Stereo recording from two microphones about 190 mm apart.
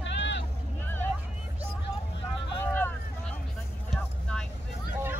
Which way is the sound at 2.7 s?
10° left (ahead or behind).